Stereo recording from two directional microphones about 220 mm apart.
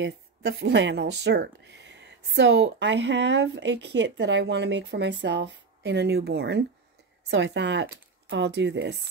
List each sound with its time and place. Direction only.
0.0 s speech: 50° right (ahead or behind)